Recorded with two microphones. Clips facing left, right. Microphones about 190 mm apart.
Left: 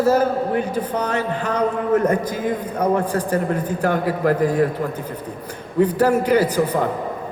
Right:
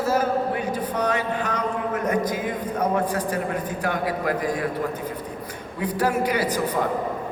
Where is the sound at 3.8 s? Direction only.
40° left (ahead or behind).